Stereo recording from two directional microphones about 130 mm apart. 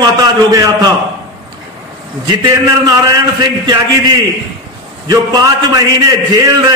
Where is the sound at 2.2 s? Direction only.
30° right (ahead or behind).